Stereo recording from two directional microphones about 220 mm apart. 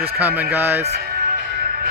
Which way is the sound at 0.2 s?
10° right (ahead or behind).